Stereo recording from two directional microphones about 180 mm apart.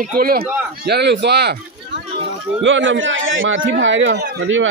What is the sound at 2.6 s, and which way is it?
A man's voice, 90° right.